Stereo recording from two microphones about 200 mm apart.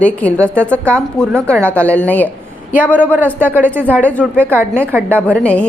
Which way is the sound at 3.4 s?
10° right (ahead or behind).